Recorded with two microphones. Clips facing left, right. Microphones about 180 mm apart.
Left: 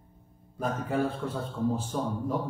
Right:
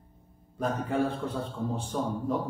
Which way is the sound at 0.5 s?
Centre (ahead or behind).